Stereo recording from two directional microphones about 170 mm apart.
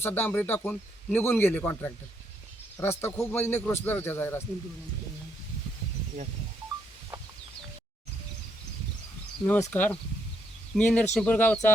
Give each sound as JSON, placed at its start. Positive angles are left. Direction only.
{"t": 0.0, "sound": "speech", "side_deg": 10}
{"t": 9.5, "sound": "speech", "side_deg": 10}